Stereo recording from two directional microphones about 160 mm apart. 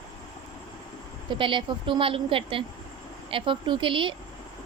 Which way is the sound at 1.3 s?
30° right (ahead or behind).